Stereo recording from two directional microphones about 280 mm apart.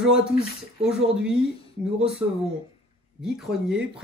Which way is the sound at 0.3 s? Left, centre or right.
Left.